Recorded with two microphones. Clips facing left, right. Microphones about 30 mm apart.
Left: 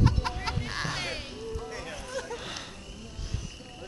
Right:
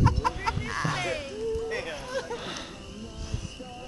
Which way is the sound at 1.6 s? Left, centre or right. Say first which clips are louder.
Right 6 dB; right.